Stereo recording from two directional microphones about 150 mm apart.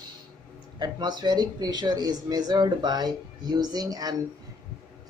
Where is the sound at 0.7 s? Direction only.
30° right (ahead or behind).